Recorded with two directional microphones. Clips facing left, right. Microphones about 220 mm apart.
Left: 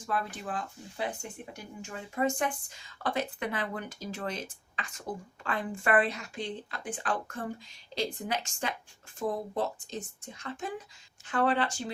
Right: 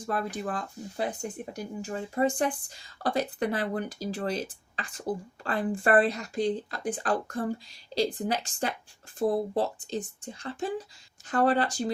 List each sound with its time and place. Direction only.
0.0 s speech: 40° right (ahead or behind)